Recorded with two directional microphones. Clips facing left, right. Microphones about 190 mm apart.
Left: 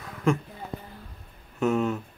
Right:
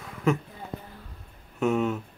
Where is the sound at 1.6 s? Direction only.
Centre (ahead or behind).